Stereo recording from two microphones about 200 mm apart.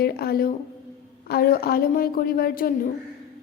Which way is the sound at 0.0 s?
50° left (ahead or behind).